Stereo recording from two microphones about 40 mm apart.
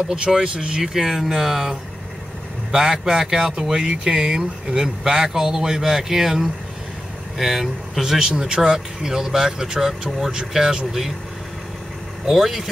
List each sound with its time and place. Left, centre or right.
0.3 s speech: right
0.8 s speech: centre
2.7 s speech: centre
8.0 s speech: centre
12.3 s speech: centre